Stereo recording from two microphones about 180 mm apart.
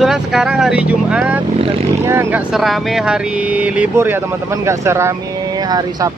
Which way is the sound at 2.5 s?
Centre (ahead or behind).